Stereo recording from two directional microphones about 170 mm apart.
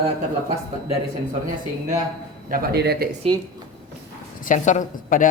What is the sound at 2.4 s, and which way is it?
Speech, 60° right (ahead or behind).